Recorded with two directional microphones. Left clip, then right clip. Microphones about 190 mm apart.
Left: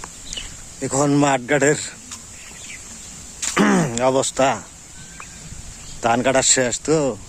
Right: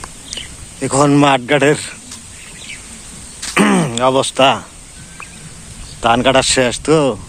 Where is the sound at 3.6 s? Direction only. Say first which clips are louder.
Right 5 dB; 20° left (ahead or behind).